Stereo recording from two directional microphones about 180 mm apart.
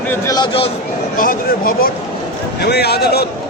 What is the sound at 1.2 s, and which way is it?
Speech, 50° left (ahead or behind).